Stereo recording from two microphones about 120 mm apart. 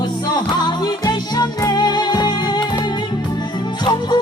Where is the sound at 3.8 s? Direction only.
35° left (ahead or behind).